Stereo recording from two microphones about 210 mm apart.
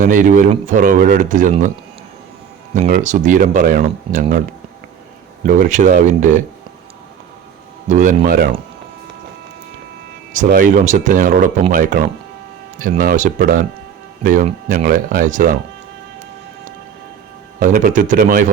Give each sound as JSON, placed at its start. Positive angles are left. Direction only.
{"t": 0.0, "sound": "speech", "side_deg": -40}
{"t": 2.7, "sound": "speech", "side_deg": -35}
{"t": 5.5, "sound": "speech", "side_deg": -40}
{"t": 7.9, "sound": "speech", "side_deg": -35}
{"t": 10.3, "sound": "speech", "side_deg": -40}
{"t": 17.6, "sound": "speech", "side_deg": -40}